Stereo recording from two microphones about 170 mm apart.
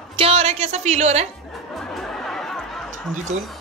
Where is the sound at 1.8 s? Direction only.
5° left (ahead or behind).